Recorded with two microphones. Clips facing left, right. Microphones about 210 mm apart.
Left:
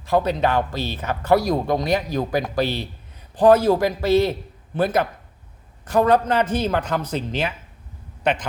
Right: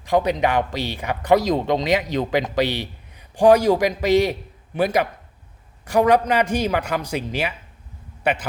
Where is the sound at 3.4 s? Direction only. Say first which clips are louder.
Even; 15° right (ahead or behind).